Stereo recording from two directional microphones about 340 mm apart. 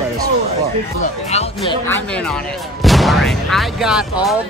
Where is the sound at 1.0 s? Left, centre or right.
Centre.